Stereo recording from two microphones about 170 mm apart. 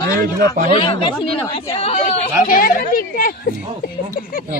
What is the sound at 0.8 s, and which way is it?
Speech, 30° left (ahead or behind).